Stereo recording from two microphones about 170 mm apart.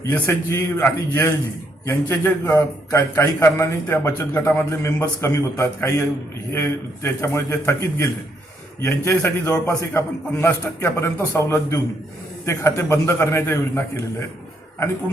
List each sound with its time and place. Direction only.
0.1 s a man's voice: 15° left (ahead or behind)